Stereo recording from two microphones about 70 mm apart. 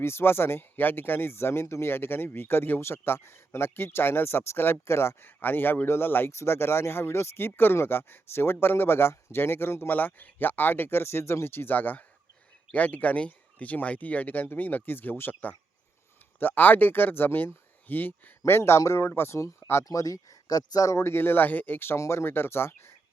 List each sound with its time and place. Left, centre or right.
0.0 s speech: left
19.8 s speech: left
20.9 s speech: left